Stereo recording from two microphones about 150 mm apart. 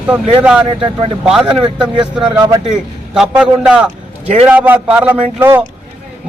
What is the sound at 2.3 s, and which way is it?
Speech, 25° right (ahead or behind).